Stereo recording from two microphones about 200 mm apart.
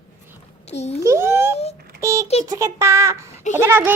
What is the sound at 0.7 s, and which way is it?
Speech, 35° left (ahead or behind).